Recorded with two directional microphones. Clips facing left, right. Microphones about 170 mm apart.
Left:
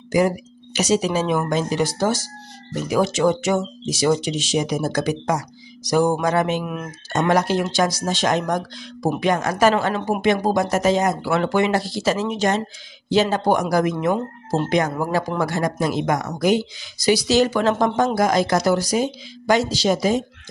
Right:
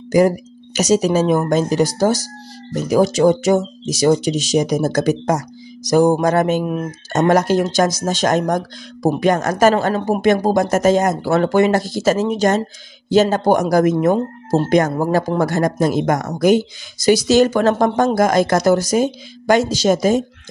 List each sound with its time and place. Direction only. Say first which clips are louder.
0.7 s speech: right 5 dB; 40° right (ahead or behind)